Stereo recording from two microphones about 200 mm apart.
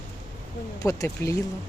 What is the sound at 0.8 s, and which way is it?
Speech, 15° left (ahead or behind).